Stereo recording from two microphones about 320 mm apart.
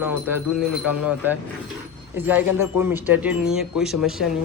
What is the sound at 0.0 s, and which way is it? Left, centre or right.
Speech, centre.